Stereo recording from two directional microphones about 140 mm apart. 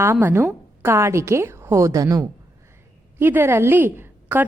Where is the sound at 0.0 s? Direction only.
15° right (ahead or behind).